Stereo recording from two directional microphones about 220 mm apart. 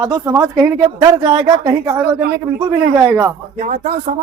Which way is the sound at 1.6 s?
10° right (ahead or behind).